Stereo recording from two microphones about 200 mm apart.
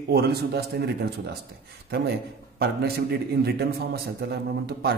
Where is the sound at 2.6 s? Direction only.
50° right (ahead or behind).